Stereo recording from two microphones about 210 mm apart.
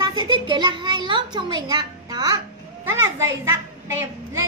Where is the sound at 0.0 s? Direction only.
20° right (ahead or behind).